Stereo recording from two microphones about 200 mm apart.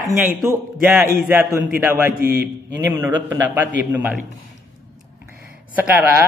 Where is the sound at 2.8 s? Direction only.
10° right (ahead or behind).